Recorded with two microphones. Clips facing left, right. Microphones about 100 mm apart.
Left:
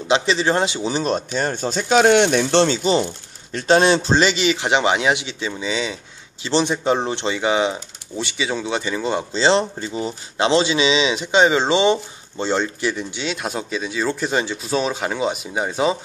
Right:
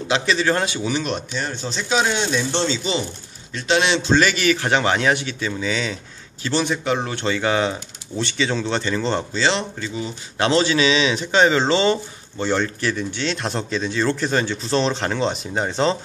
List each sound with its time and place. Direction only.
0.1 s speech: 25° left (ahead or behind); by 2.8 s 60° left (ahead or behind)
3.5 s speech: 40° left (ahead or behind)
4.2 s speech: 20° left (ahead or behind)
9.3 s speech: 30° left (ahead or behind)
10.3 s speech: 20° left (ahead or behind)